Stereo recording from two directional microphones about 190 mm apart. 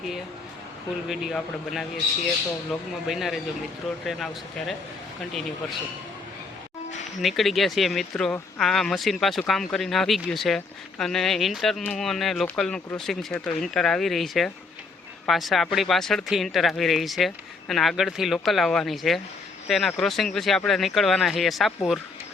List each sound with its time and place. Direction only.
1.0 s speech: centre (ahead or behind)
3.1 s speech: centre (ahead or behind)
7.2 s speech: centre (ahead or behind)